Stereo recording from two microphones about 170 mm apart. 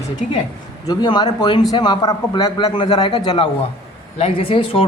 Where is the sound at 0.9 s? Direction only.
25° left (ahead or behind).